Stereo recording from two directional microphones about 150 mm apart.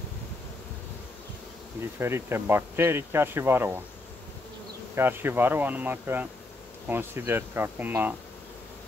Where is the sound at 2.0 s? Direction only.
15° right (ahead or behind).